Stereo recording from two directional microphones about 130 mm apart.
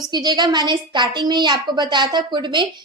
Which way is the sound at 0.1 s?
30° right (ahead or behind).